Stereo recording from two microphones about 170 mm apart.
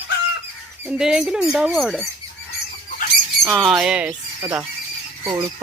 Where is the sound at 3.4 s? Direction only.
5° left (ahead or behind).